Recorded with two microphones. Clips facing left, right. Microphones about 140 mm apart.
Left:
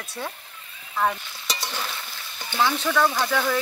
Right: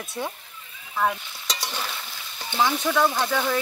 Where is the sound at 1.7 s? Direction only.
10° right (ahead or behind).